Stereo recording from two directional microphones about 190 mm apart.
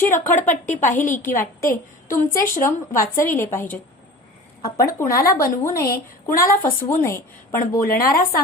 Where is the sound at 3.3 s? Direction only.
10° left (ahead or behind).